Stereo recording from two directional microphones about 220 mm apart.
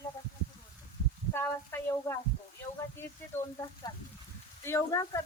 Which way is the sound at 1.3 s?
10° left (ahead or behind).